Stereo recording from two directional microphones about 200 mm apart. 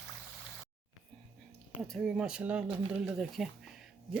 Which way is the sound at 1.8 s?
Centre (ahead or behind).